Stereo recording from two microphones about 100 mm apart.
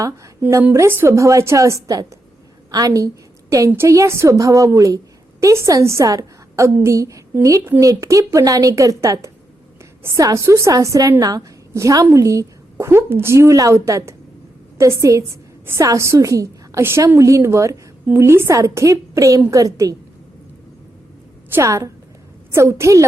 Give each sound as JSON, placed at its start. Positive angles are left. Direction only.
{"t": 0.6, "sound": "a woman's voice", "side_deg": -25}
{"t": 21.5, "sound": "a woman's voice", "side_deg": -30}